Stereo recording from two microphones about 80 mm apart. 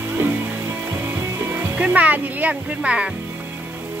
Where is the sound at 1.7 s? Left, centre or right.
Centre.